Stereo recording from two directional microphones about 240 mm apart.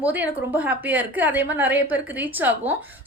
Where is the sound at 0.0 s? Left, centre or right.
Centre.